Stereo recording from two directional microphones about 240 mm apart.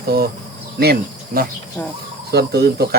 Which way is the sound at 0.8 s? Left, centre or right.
Right.